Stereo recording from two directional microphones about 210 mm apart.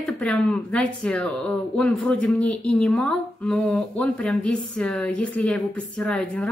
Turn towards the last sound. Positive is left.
turn(degrees=5)  # may be behind; listen again after turning